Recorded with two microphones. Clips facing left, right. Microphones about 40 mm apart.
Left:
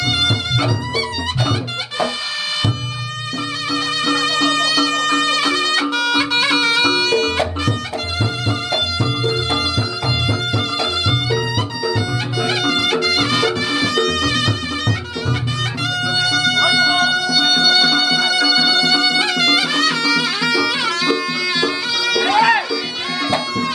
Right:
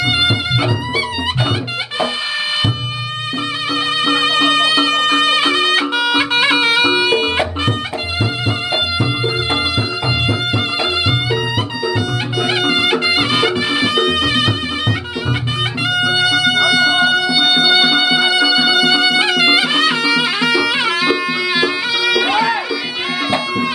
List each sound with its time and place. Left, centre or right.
0.0 s music: right
3.7 s music: centre